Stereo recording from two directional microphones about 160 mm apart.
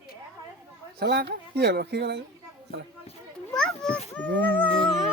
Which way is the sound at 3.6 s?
5° left (ahead or behind).